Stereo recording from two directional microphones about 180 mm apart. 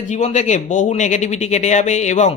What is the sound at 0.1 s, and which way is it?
A man's voice, 40° left (ahead or behind).